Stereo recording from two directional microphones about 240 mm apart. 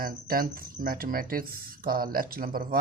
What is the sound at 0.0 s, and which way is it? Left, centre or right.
A man's voice, right.